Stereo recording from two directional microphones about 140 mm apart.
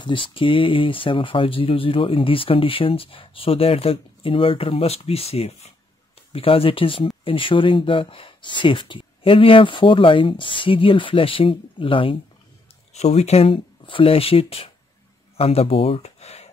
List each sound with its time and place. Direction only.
0.0 s speech: 35° left (ahead or behind)
12.9 s speech: 50° left (ahead or behind)